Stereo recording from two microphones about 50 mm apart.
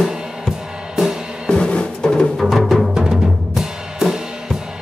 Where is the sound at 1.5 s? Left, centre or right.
Centre.